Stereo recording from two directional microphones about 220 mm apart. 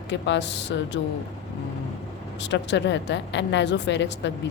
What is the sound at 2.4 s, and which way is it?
Speech, 55° left (ahead or behind).